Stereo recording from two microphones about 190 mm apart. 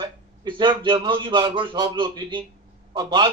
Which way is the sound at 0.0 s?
25° right (ahead or behind).